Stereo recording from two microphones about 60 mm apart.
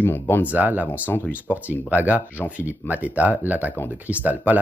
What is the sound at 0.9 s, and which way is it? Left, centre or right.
Speech, left.